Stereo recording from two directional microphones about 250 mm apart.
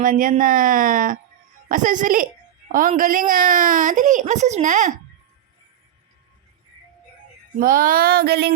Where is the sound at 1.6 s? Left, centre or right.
Right.